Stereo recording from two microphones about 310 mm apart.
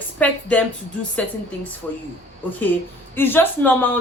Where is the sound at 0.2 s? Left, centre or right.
Centre.